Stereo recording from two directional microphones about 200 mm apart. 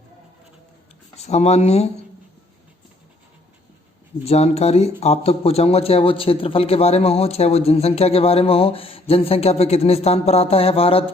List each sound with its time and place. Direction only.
1.1 s speech: 30° left (ahead or behind)
4.2 s speech: 30° left (ahead or behind)